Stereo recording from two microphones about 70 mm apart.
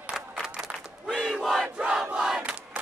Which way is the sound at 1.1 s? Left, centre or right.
Centre.